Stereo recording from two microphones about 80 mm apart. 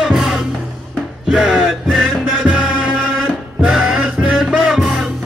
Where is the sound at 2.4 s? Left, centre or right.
Centre.